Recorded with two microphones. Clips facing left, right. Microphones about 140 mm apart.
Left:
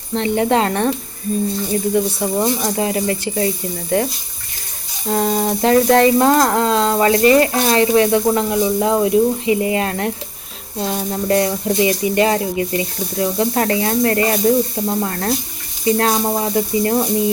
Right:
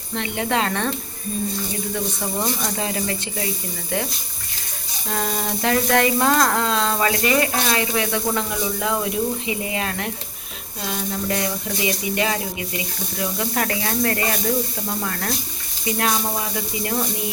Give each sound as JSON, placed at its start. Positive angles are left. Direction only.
{"t": 0.1, "sound": "speech", "side_deg": 30}
{"t": 0.7, "sound": "speech", "side_deg": 15}
{"t": 2.4, "sound": "speech", "side_deg": 25}
{"t": 5.0, "sound": "speech", "side_deg": 25}